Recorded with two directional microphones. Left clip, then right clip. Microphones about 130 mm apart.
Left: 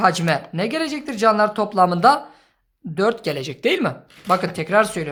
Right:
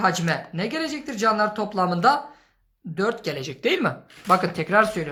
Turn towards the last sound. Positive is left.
turn(degrees=20)  # may be behind; listen again after turning